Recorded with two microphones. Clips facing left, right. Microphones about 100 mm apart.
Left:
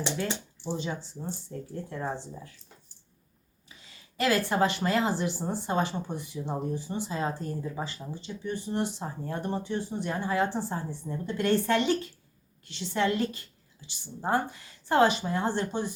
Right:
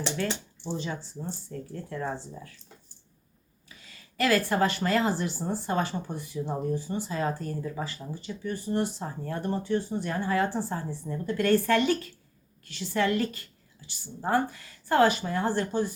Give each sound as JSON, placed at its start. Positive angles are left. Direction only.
{"t": 0.0, "sound": "speech", "side_deg": 15}
{"t": 3.7, "sound": "speech", "side_deg": 25}